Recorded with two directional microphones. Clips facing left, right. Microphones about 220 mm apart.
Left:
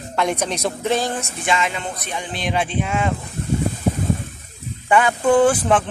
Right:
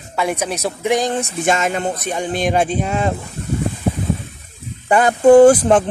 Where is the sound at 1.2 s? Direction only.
40° right (ahead or behind).